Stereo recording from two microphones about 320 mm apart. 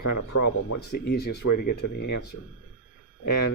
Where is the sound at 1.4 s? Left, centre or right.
Left.